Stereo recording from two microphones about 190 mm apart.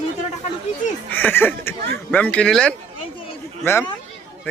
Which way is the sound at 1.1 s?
10° left (ahead or behind).